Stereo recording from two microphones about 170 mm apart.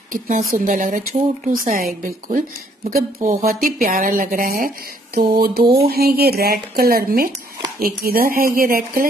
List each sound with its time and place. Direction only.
0.1 s a woman's voice: 55° right (ahead or behind)